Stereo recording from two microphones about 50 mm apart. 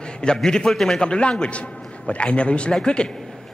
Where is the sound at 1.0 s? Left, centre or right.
Centre.